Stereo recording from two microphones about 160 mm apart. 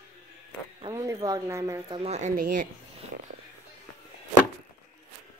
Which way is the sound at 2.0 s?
45° right (ahead or behind).